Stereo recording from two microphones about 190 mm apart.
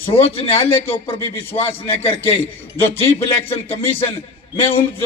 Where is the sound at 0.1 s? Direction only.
30° left (ahead or behind).